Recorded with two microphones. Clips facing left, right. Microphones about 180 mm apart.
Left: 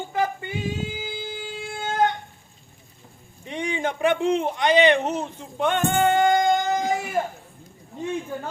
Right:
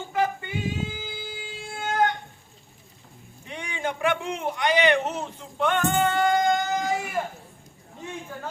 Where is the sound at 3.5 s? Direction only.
20° left (ahead or behind).